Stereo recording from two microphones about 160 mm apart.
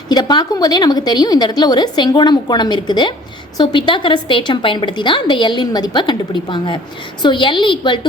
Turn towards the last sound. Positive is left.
turn(degrees=30)  # may be behind; listen again after turning